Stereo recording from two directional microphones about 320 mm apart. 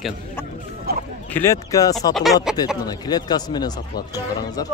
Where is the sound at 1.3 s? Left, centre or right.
Centre.